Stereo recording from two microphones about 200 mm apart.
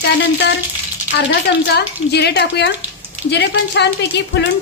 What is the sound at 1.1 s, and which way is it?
A woman's voice, 60° left (ahead or behind).